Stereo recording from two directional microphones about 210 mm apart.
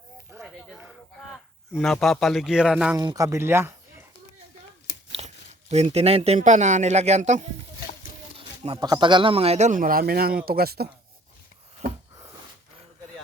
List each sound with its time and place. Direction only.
0.4 s a sound: 5° right (ahead or behind)
3.0 s speech: 15° right (ahead or behind)
5.1 s speech: 30° right (ahead or behind); by 10.8 s 50° right (ahead or behind)